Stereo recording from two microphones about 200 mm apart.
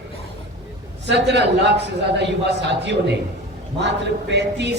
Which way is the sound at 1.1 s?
60° right (ahead or behind).